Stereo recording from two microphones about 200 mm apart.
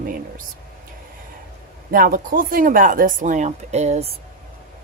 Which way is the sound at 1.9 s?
45° right (ahead or behind).